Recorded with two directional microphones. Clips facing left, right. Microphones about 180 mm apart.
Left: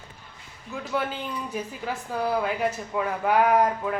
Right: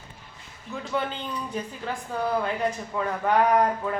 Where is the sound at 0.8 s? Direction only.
5° left (ahead or behind).